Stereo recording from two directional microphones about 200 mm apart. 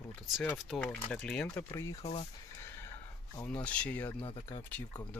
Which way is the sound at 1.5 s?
15° left (ahead or behind).